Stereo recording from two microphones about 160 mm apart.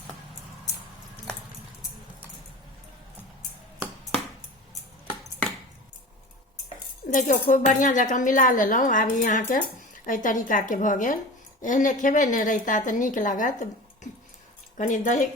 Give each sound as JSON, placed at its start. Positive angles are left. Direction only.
{"t": 7.1, "sound": "a woman's voice", "side_deg": 55}